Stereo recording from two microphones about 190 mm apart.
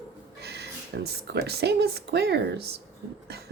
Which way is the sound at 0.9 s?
60° right (ahead or behind).